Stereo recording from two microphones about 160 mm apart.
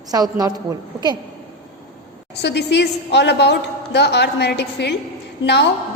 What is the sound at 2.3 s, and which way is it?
A woman's voice, 90° left.